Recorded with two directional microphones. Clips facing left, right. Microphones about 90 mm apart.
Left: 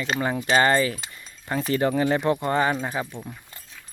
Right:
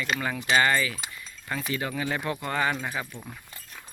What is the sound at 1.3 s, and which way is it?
Keys jangling, 25° left (ahead or behind).